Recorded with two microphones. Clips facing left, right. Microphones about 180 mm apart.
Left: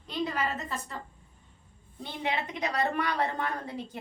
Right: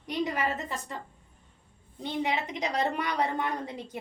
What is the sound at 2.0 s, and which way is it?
A woman's voice, 15° right (ahead or behind).